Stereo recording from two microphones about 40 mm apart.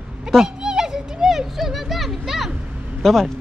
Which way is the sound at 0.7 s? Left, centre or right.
Centre.